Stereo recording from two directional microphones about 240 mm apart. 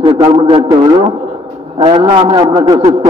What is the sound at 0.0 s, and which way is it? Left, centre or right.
A man's voice, right.